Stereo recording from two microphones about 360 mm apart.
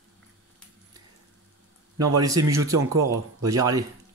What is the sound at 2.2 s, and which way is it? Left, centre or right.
Speech, centre.